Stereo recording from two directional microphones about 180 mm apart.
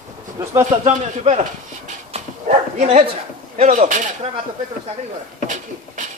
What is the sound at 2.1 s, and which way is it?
Dog, 35° right (ahead or behind).